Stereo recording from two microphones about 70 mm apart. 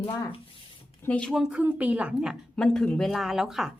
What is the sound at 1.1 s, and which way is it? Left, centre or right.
Speech, centre.